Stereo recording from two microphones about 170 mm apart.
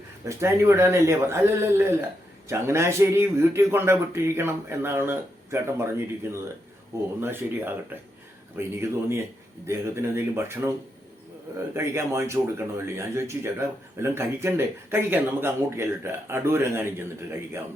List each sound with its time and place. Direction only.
0.3 s a man's voice: 15° right (ahead or behind)
11.7 s a man's voice: 15° right (ahead or behind)